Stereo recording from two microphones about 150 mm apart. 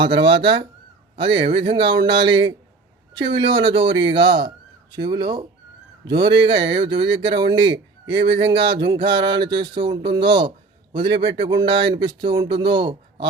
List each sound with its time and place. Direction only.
0.0 s speech: 35° right (ahead or behind)